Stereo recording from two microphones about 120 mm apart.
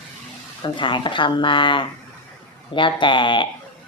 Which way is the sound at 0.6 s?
40° left (ahead or behind).